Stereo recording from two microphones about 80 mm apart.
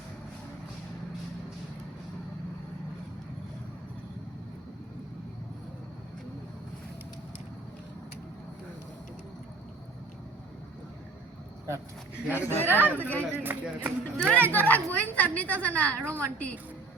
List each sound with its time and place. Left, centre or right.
12.1 s a woman's voice: left
12.7 s speech: right
13.0 s a woman's voice: left
13.4 s speech: right
14.0 s a woman's voice: centre